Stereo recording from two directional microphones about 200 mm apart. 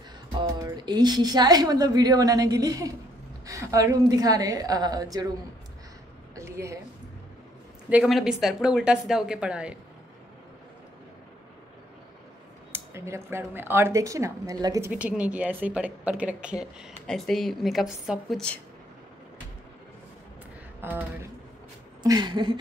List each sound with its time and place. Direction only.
0.3 s a woman's voice: 20° right (ahead or behind)
6.3 s a sound: 15° right (ahead or behind)
7.9 s speech: centre (ahead or behind)
12.7 s speech: 15° right (ahead or behind); by 18.6 s centre (ahead or behind)
20.8 s a woman's voice: 10° right (ahead or behind)